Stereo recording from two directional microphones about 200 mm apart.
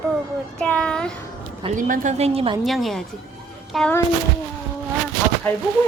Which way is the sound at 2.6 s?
Centre (ahead or behind).